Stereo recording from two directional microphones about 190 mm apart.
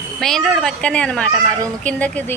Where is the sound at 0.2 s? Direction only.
Centre (ahead or behind).